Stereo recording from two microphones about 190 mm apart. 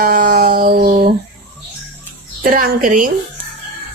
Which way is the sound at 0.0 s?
50° right (ahead or behind).